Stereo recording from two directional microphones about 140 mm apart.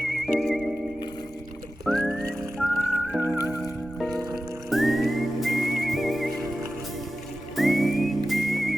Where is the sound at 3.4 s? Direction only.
25° left (ahead or behind).